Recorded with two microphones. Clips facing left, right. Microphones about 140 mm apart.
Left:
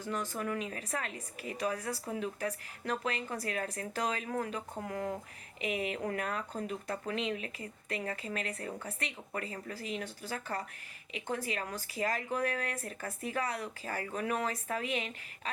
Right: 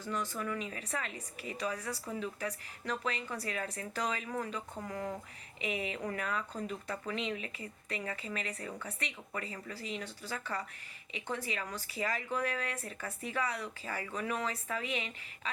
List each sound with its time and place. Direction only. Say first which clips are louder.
0.0 s a woman's voice: left 1 dB; 45° left (ahead or behind)